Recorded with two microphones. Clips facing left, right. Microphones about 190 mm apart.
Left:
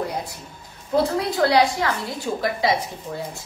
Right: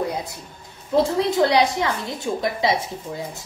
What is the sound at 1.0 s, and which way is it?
A woman's voice, 25° right (ahead or behind).